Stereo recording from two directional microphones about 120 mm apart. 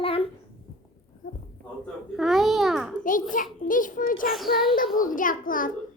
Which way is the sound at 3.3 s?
90° left.